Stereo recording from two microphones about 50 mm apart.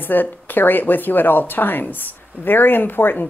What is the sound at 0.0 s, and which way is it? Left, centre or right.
Speech, left.